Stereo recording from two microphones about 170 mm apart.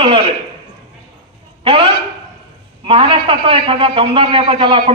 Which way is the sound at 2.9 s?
30° right (ahead or behind).